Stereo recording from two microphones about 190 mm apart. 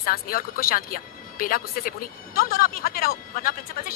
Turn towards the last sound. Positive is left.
turn(degrees=50)  # may be behind; listen again after turning